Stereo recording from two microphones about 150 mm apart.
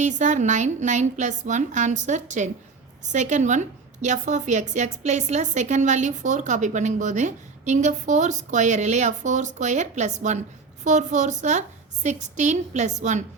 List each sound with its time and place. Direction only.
0.0 s a woman's voice: 55° right (ahead or behind)